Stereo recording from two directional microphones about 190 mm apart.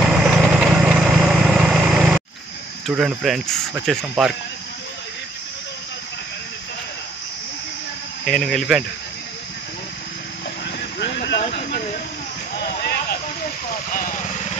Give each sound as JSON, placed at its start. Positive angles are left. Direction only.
{"t": 0.0, "sound": "engine", "side_deg": 0}
{"t": 3.0, "sound": "speech", "side_deg": 0}
{"t": 8.3, "sound": "speech", "side_deg": 5}
{"t": 10.8, "sound": "vehicle", "side_deg": 60}
{"t": 13.8, "sound": "vehicle", "side_deg": 45}